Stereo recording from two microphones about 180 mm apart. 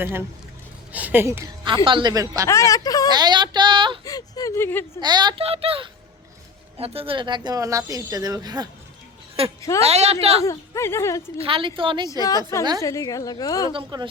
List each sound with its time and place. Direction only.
0.0 s speech: 10° right (ahead or behind)
1.6 s speech: 30° right (ahead or behind)
2.5 s a woman's voice: 15° left (ahead or behind)
3.1 s speech: 25° right (ahead or behind)
4.0 s speech: 20° left (ahead or behind)
4.9 s speech: 25° right (ahead or behind)
9.6 s speech: 15° left (ahead or behind)
9.8 s a woman's voice: 35° right (ahead or behind)
10.4 s speech: 15° left (ahead or behind)
11.3 s speech: 30° right (ahead or behind)
12.8 s a woman's voice: 20° left (ahead or behind)
13.7 s speech: 25° right (ahead or behind)